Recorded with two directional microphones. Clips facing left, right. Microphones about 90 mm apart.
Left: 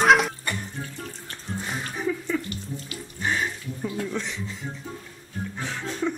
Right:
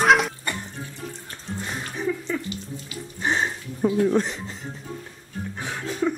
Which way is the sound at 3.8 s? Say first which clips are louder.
Right 10 dB; 50° right (ahead or behind).